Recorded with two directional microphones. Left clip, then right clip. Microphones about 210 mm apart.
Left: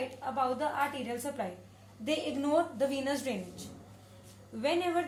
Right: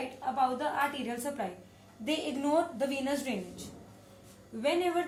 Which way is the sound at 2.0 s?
25° left (ahead or behind).